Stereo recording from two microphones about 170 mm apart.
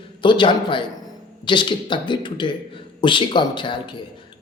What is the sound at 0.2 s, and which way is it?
A man's voice, 30° left (ahead or behind).